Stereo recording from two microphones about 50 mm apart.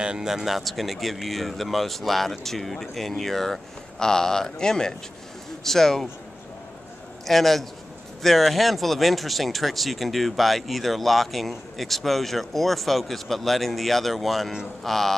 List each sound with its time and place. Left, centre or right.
0.0 s speech: centre
7.2 s speech: centre